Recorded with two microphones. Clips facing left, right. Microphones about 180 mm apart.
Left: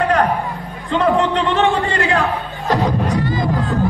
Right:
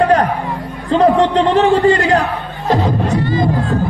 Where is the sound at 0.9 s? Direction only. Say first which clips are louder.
Right 5 dB; 35° right (ahead or behind).